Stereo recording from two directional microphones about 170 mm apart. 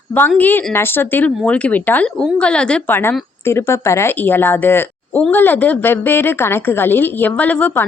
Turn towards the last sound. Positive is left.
turn(degrees=10)  # may be behind; listen again after turning